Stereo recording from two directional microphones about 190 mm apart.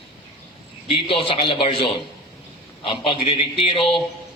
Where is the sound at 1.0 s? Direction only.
30° left (ahead or behind).